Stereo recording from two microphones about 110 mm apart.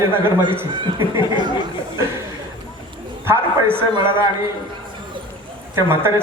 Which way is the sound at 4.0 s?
45° left (ahead or behind).